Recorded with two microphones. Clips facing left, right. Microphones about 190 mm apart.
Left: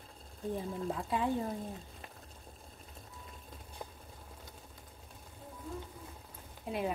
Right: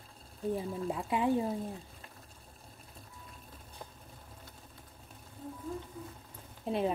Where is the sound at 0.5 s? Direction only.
15° right (ahead or behind).